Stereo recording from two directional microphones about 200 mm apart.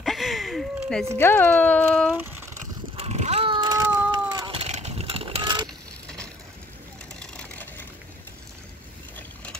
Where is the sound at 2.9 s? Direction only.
30° right (ahead or behind).